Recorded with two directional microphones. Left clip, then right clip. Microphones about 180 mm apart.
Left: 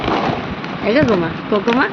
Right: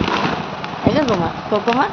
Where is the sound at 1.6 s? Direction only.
10° right (ahead or behind).